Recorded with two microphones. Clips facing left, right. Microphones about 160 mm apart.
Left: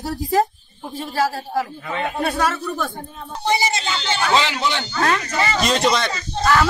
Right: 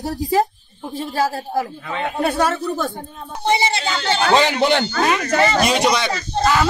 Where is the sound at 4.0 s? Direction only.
60° right (ahead or behind).